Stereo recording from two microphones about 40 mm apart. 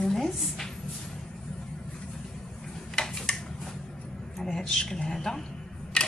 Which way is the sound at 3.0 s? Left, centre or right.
Centre.